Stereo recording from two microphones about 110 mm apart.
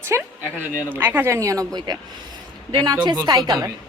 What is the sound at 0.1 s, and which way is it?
A woman's voice, 25° right (ahead or behind).